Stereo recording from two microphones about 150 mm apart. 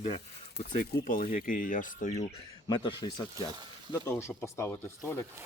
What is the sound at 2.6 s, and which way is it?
Speech, 30° left (ahead or behind).